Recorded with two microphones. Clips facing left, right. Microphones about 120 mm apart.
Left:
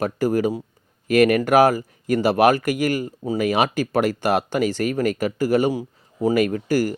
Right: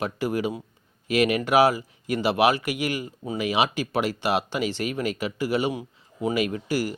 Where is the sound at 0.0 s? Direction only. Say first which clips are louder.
Left 6 dB; 40° left (ahead or behind).